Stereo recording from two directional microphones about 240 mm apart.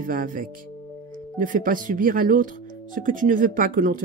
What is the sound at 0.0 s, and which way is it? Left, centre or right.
Speech, right.